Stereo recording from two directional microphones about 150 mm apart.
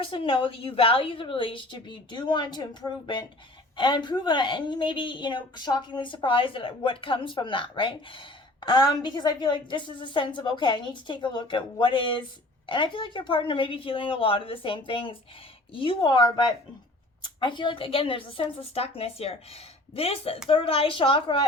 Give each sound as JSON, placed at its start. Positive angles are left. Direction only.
{"t": 0.0, "sound": "a woman's voice", "side_deg": 35}